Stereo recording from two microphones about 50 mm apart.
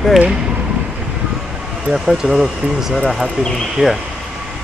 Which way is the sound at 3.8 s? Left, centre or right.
Left.